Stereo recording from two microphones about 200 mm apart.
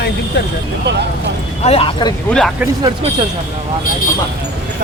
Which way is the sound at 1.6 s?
30° left (ahead or behind).